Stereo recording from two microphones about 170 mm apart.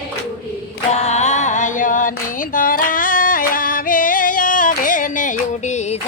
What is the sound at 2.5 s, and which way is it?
Singing, 55° left (ahead or behind).